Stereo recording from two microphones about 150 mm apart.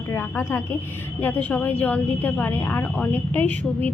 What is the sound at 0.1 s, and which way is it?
A woman's voice, 15° left (ahead or behind).